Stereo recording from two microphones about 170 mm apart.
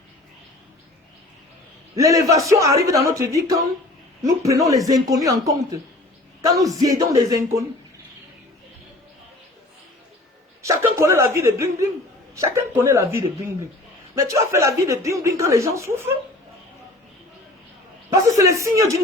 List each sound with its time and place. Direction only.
2.0 s speech: 20° right (ahead or behind)
10.6 s a sound: 15° right (ahead or behind)
12.3 s speech: 15° right (ahead or behind)
18.1 s speech: 20° right (ahead or behind)